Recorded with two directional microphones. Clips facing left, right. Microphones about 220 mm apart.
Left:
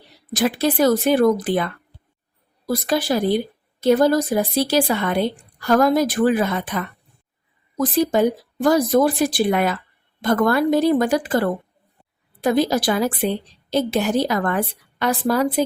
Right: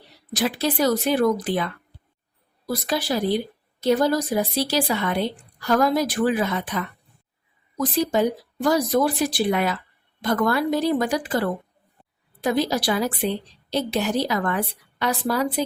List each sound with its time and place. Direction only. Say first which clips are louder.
0.3 s a woman's voice: left 4 dB; 50° left (ahead or behind)
8.1 s a woman's voice: left 3 dB; 50° left (ahead or behind)